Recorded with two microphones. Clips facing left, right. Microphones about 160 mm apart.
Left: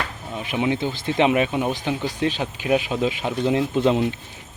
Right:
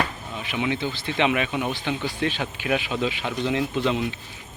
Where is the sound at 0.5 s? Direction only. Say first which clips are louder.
Left 3 dB; 40° left (ahead or behind).